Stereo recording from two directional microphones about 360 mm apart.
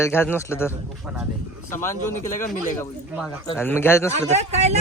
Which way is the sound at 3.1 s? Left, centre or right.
Centre.